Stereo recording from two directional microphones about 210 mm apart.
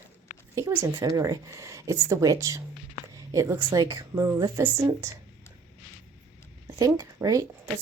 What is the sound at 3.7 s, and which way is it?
Speech, 20° right (ahead or behind).